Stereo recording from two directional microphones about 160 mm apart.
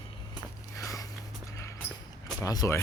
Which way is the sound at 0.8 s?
20° left (ahead or behind).